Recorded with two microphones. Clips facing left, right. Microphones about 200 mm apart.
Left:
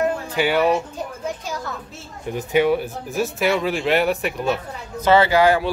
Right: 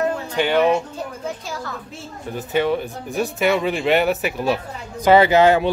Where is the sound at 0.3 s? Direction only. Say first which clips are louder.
Right 2 dB; 10° left (ahead or behind).